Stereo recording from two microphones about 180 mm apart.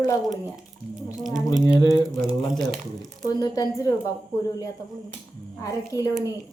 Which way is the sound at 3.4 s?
20° left (ahead or behind).